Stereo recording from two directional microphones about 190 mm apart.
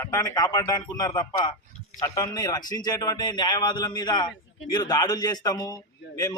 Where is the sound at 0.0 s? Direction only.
15° left (ahead or behind).